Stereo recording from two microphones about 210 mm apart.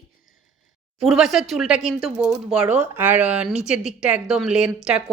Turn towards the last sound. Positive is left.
turn(degrees=-5)  # may be behind; listen again after turning